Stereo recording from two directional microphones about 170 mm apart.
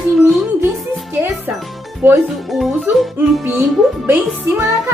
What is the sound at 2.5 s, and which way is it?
Music, centre (ahead or behind).